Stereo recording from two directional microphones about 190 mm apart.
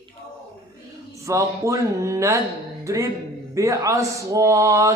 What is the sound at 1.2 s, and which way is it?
Speech, 15° right (ahead or behind).